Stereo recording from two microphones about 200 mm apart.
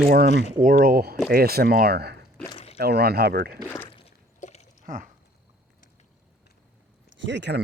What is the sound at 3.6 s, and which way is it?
Speech, 10° left (ahead or behind).